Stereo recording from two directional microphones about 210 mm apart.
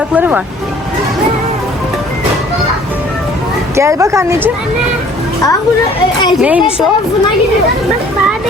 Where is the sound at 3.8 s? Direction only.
15° right (ahead or behind).